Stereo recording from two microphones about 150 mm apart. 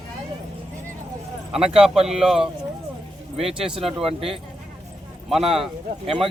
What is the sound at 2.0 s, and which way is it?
Speech, 5° right (ahead or behind).